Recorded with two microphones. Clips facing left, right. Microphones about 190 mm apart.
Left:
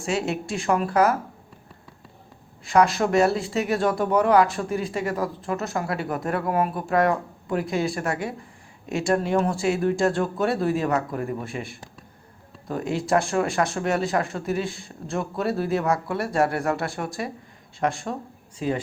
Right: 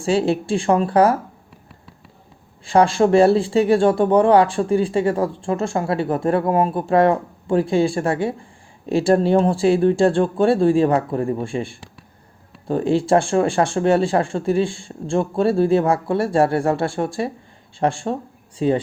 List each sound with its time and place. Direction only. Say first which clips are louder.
0.0 s speech: right 7 dB; 30° right (ahead or behind)
2.6 s speech: right 5 dB; 30° right (ahead or behind)